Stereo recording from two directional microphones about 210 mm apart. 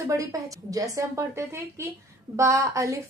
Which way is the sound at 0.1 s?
15° right (ahead or behind).